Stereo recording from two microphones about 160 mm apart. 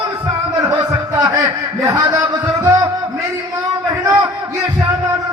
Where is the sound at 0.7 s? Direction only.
25° right (ahead or behind).